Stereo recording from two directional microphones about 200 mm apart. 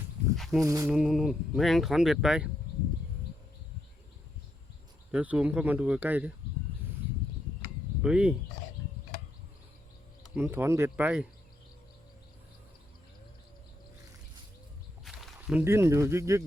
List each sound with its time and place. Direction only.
0.3 s speech: centre (ahead or behind)
0.6 s speech: 15° right (ahead or behind)
0.9 s speech: 5° right (ahead or behind)
5.1 s speech: 5° right (ahead or behind)
8.0 s speech: 5° right (ahead or behind)
10.3 s speech: 10° right (ahead or behind)
15.0 s a sound: centre (ahead or behind)
15.6 s speech: 10° right (ahead or behind)